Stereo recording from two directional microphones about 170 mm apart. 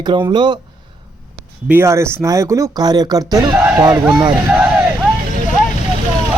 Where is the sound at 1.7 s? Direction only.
15° right (ahead or behind).